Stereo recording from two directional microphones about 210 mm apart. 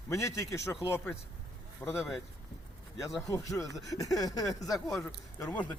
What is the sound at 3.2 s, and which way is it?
Speech, 15° left (ahead or behind).